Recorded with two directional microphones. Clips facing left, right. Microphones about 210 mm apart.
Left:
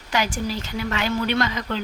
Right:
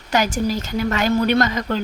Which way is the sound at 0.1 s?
40° right (ahead or behind).